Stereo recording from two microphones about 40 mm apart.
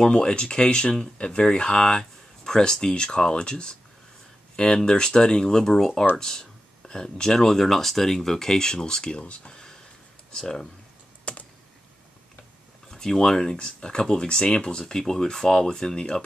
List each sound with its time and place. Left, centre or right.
0.0 s speech: centre
11.3 s computer keyboard: left
12.9 s speech: centre
13.6 s speech: left